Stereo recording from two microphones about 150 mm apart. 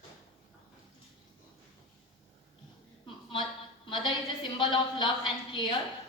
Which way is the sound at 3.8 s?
30° left (ahead or behind).